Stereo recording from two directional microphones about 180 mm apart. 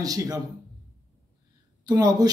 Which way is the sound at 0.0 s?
20° right (ahead or behind).